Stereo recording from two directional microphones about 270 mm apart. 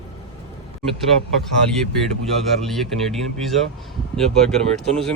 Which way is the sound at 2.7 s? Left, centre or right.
Centre.